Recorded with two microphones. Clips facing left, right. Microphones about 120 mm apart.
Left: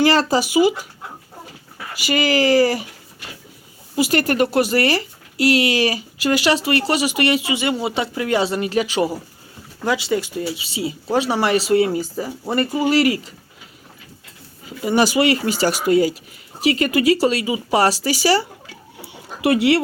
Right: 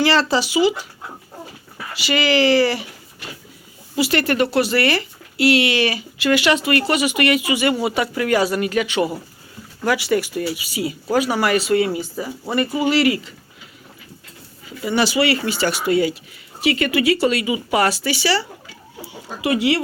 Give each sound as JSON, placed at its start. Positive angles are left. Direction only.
{"t": 0.0, "sound": "speech", "side_deg": 45}
{"t": 2.0, "sound": "speech", "side_deg": 45}
{"t": 3.9, "sound": "speech", "side_deg": 45}
{"t": 9.8, "sound": "speech", "side_deg": 20}
{"t": 14.8, "sound": "speech", "side_deg": 45}
{"t": 19.0, "sound": "speech", "side_deg": 65}